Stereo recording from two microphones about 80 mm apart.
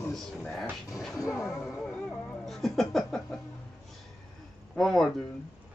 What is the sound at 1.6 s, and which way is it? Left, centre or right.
Music, centre.